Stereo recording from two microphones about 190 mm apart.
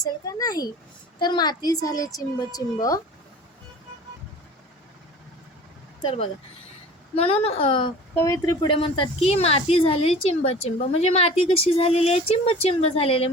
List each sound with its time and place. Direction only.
0.0 s a sound: 20° left (ahead or behind)
1.2 s a woman's voice: 20° left (ahead or behind)
7.2 s a woman's voice: 30° left (ahead or behind)